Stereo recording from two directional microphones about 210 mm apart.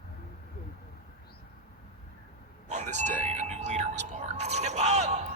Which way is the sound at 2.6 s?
35° right (ahead or behind).